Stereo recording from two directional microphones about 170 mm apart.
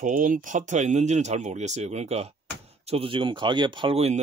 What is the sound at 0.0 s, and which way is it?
Speech, 50° right (ahead or behind).